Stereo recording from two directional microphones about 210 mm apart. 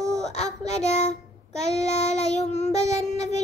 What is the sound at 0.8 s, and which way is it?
Child singing, 30° left (ahead or behind).